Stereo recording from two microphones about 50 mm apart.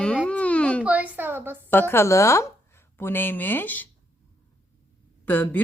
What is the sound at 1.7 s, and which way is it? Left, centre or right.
Speech, left.